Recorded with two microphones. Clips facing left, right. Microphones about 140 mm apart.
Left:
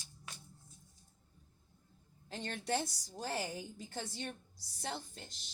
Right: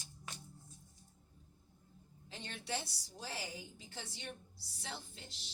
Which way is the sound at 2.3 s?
50° left (ahead or behind).